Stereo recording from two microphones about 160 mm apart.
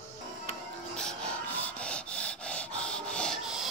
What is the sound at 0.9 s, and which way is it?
Rub, 5° left (ahead or behind).